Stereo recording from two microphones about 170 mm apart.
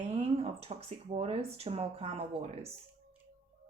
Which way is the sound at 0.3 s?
35° right (ahead or behind).